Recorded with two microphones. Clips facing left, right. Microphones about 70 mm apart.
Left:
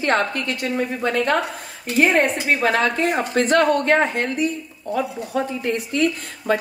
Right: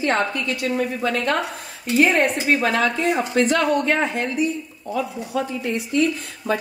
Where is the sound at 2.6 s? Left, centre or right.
Left.